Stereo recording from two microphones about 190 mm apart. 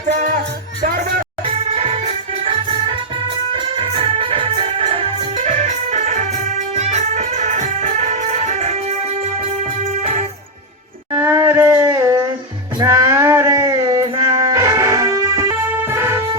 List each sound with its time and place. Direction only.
0.1 s music: 45° right (ahead or behind)
1.5 s music: 30° right (ahead or behind)
3.5 s organ: 30° right (ahead or behind)
6.7 s music: 35° right (ahead or behind)
10.0 s music: 40° right (ahead or behind)
11.2 s a sound: 10° right (ahead or behind)
12.8 s music: 15° right (ahead or behind)